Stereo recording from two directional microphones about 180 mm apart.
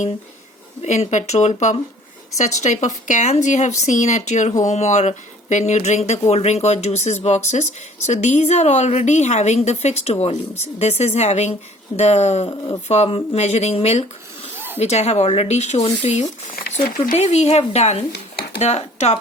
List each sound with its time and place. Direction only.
0.8 s speech: 40° left (ahead or behind)
12.5 s speech: 20° left (ahead or behind)
12.9 s speech: 35° left (ahead or behind)
18.1 s a sound: 65° left (ahead or behind)
18.6 s speech: 40° left (ahead or behind)